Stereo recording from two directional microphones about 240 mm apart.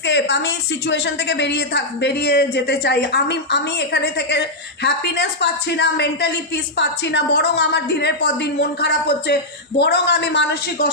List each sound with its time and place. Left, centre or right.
0.0 s a woman's voice: left